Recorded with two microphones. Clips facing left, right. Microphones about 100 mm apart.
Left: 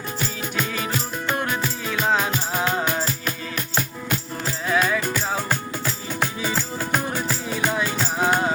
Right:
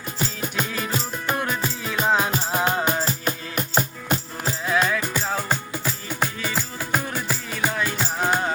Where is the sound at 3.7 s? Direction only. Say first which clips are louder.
Right 3 dB; 30° right (ahead or behind).